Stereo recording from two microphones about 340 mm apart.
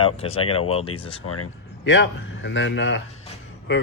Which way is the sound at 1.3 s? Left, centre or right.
Left.